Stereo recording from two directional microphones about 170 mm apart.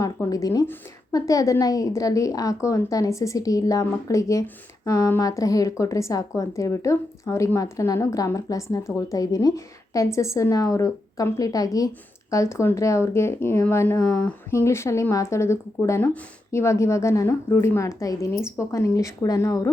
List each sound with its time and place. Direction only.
0.0 s a woman's voice: 20° left (ahead or behind)